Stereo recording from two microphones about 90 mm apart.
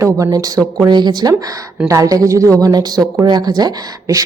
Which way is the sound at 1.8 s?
35° right (ahead or behind).